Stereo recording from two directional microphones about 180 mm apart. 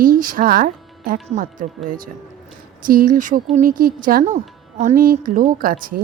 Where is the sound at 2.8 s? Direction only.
50° right (ahead or behind).